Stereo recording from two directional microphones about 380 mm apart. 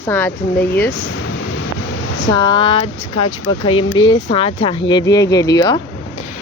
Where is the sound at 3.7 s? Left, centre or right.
Left.